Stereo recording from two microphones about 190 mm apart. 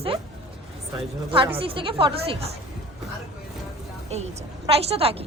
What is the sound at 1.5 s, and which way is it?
Speech, 30° right (ahead or behind).